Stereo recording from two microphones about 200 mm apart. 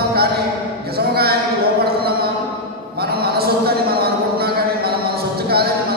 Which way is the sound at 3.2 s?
50° right (ahead or behind).